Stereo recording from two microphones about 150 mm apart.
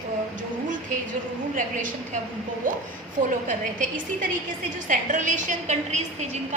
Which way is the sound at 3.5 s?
60° right (ahead or behind).